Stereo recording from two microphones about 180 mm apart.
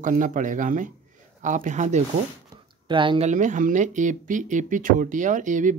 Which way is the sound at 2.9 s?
25° right (ahead or behind).